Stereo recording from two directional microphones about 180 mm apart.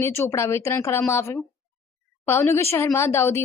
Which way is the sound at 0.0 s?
15° left (ahead or behind).